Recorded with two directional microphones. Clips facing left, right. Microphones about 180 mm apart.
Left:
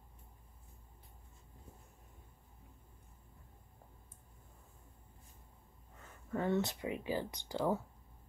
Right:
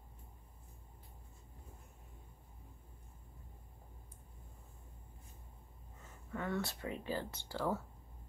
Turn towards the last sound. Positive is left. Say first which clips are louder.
# left 3 dB
turn(degrees=15)  # may be behind; listen again after turning